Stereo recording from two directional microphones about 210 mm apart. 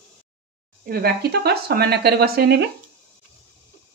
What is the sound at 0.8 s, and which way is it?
Speech, 45° right (ahead or behind).